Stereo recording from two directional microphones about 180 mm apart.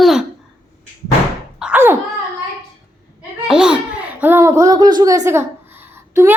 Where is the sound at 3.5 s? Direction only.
5° right (ahead or behind).